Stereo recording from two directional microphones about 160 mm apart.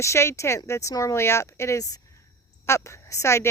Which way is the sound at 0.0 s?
15° left (ahead or behind).